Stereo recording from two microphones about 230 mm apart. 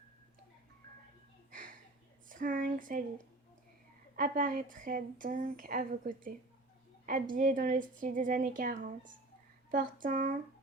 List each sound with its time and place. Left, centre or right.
1.5 s a sound: right
2.3 s speech: right
4.2 s speech: right